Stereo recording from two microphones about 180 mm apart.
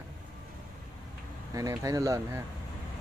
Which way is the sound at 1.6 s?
20° right (ahead or behind).